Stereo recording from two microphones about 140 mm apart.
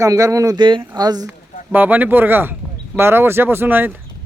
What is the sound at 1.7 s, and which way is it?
Speech, 15° right (ahead or behind).